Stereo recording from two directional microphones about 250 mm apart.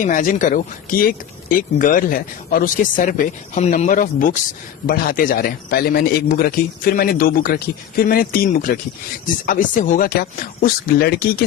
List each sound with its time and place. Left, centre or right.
0.0 s a man's voice: left